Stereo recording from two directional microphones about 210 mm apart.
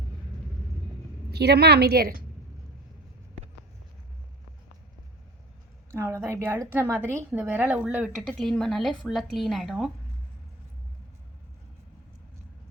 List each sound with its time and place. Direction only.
1.3 s a woman's voice: 50° right (ahead or behind)
5.9 s a woman's voice: 15° right (ahead or behind)